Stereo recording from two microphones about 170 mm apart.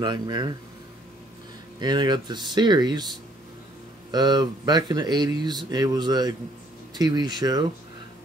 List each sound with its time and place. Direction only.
0.0 s speech: 25° right (ahead or behind)
1.8 s speech: 25° right (ahead or behind)
4.1 s speech: 25° right (ahead or behind)